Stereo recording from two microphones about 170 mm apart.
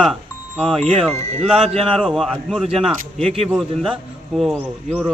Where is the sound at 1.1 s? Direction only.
40° right (ahead or behind).